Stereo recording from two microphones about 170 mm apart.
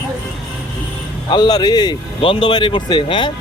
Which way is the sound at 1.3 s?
25° left (ahead or behind).